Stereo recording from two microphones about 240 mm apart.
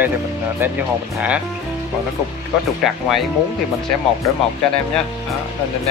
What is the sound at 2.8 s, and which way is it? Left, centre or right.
Speech, centre.